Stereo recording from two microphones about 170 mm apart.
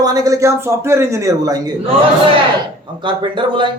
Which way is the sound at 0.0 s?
20° right (ahead or behind).